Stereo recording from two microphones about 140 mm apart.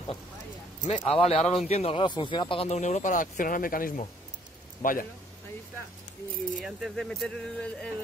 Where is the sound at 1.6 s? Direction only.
45° left (ahead or behind).